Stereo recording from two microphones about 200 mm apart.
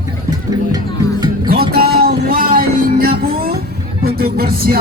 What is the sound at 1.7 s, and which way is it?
Music, 50° right (ahead or behind).